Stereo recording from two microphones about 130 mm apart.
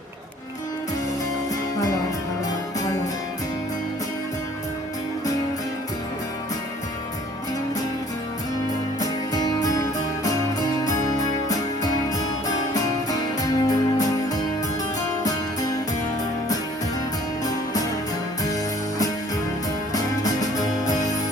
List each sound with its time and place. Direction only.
9.0 s music: 30° left (ahead or behind)
10.8 s music: 30° left (ahead or behind)
19.9 s music: 30° left (ahead or behind)